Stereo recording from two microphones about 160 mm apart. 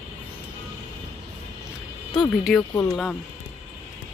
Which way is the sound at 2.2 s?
Centre (ahead or behind).